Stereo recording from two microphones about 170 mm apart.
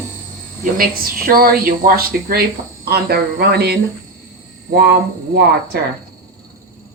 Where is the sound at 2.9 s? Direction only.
70° right (ahead or behind).